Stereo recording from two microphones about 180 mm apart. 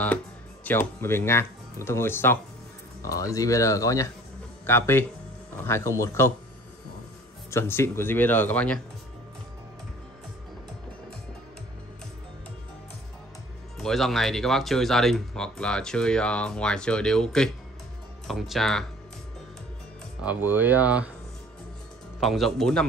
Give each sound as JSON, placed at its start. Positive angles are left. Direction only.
{"t": 0.7, "sound": "speech", "side_deg": 10}
{"t": 7.5, "sound": "speech", "side_deg": 15}
{"t": 13.7, "sound": "speech", "side_deg": 0}
{"t": 20.2, "sound": "speech", "side_deg": -10}
{"t": 22.2, "sound": "speech", "side_deg": 0}